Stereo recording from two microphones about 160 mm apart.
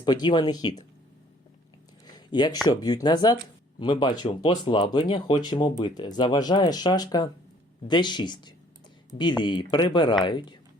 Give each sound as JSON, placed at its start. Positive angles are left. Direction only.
{"t": 0.0, "sound": "speech", "side_deg": 30}
{"t": 2.0, "sound": "a sound", "side_deg": 25}
{"t": 2.6, "sound": "speech", "side_deg": 25}